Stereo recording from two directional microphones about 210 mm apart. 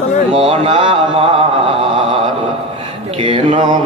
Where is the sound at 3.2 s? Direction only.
25° right (ahead or behind).